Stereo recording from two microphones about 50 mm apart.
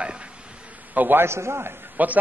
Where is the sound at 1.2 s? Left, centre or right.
Right.